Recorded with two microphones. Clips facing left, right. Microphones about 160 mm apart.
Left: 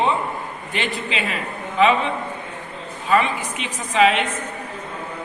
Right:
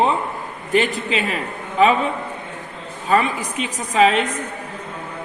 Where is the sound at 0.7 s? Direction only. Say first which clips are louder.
Right 7 dB; 40° right (ahead or behind).